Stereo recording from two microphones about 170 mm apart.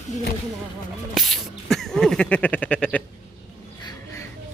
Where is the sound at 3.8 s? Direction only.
25° left (ahead or behind).